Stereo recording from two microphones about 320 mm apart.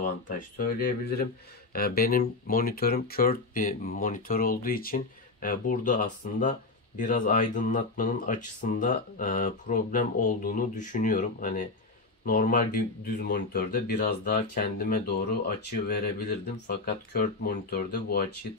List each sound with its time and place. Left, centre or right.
0.0 s speech: left